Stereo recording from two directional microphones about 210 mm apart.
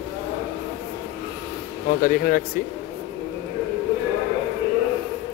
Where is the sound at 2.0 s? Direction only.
40° left (ahead or behind).